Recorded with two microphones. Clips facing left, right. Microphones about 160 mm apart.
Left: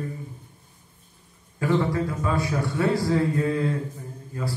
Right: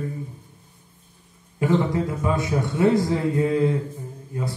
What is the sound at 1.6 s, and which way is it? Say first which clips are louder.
A man's voice: right 2 dB; 20° right (ahead or behind).